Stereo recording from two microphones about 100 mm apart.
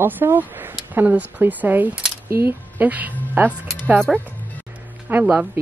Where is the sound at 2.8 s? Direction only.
15° right (ahead or behind).